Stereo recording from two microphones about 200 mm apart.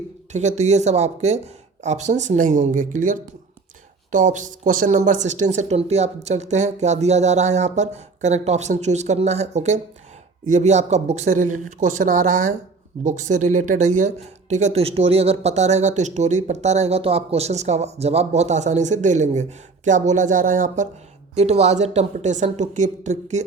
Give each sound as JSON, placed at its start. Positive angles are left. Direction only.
{"t": 0.3, "sound": "speech", "side_deg": -35}